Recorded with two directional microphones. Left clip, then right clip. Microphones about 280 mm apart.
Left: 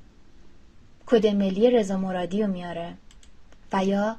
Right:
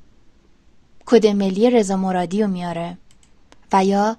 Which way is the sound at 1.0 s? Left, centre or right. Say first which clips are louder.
Right 6 dB; right.